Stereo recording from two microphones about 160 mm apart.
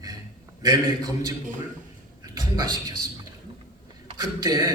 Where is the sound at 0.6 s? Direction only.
25° right (ahead or behind).